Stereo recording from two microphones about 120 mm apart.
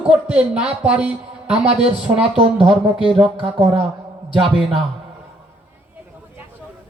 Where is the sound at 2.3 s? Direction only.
50° right (ahead or behind).